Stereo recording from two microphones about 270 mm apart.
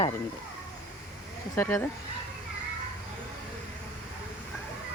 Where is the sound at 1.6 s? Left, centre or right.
Centre.